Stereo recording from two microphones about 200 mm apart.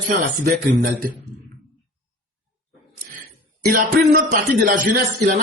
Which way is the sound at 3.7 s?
40° right (ahead or behind).